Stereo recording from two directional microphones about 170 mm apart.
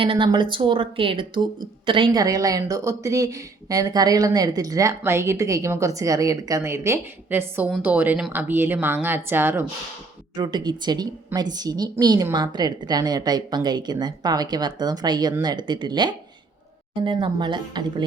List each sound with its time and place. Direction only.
0.0 s a woman's voice: 30° right (ahead or behind); by 9.6 s 10° right (ahead or behind)
10.3 s a woman's voice: 25° right (ahead or behind)